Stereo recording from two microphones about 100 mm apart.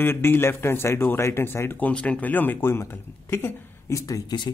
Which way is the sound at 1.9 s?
15° left (ahead or behind).